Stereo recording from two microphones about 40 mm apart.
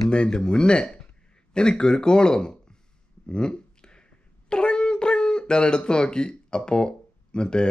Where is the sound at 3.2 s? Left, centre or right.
Left.